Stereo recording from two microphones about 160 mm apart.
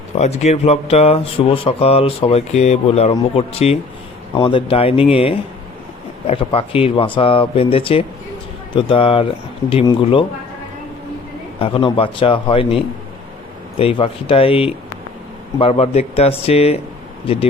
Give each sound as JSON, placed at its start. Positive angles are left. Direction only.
{"t": 0.2, "sound": "speech", "side_deg": 45}
{"t": 11.6, "sound": "speech", "side_deg": 35}